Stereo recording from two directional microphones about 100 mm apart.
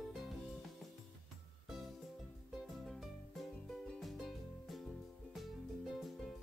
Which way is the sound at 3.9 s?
Centre (ahead or behind).